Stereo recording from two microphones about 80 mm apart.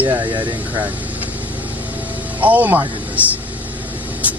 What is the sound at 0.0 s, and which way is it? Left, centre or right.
Speech, right.